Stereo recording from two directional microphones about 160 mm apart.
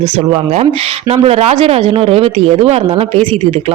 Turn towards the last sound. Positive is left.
turn(degrees=-35)  # may be behind; listen again after turning